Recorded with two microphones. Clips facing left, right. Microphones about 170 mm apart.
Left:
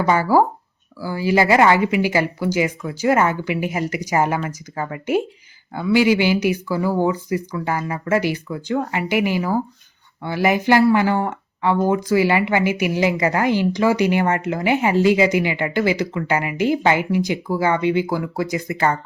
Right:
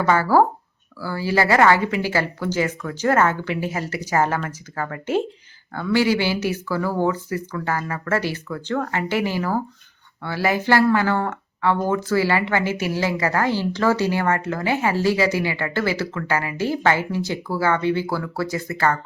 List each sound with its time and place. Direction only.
0.0 s speech: 15° left (ahead or behind)